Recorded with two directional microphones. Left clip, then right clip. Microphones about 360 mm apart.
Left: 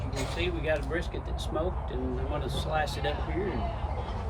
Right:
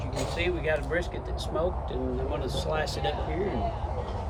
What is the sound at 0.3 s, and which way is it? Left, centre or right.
Speech, centre.